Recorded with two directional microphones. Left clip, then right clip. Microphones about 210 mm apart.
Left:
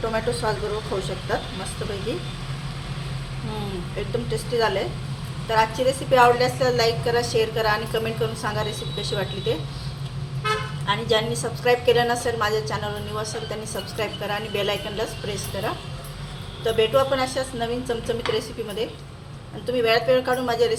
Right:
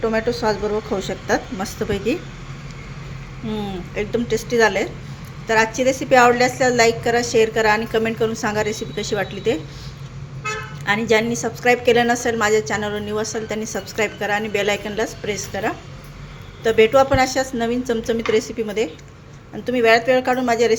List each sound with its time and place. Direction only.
0.0 s a woman's voice: 35° right (ahead or behind)
1.8 s speech: 45° right (ahead or behind)
3.9 s a woman's voice: 40° right (ahead or behind)
10.8 s a woman's voice: 40° right (ahead or behind)